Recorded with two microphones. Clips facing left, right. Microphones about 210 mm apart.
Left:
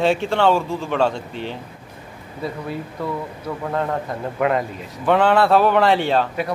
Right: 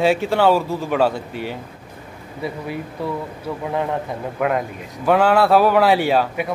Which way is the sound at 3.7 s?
15° right (ahead or behind).